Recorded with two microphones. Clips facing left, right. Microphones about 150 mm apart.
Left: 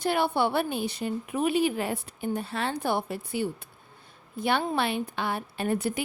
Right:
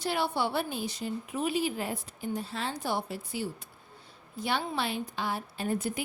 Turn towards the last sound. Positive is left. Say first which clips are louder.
# left 4 dB
turn(degrees=65)  # may be behind; listen again after turning